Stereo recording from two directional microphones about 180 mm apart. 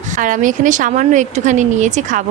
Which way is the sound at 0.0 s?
45° right (ahead or behind).